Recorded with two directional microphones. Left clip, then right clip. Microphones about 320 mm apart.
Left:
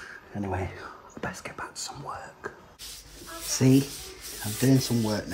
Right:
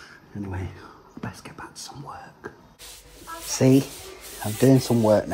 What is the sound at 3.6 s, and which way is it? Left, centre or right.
Speech, centre.